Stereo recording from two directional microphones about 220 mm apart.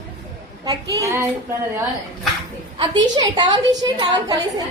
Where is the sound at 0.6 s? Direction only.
15° right (ahead or behind).